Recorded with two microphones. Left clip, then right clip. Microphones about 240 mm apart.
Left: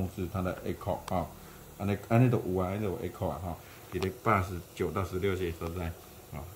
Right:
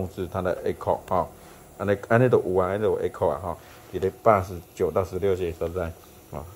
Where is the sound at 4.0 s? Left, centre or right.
Right.